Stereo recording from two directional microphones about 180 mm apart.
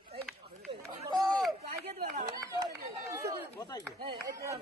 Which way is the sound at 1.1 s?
20° right (ahead or behind).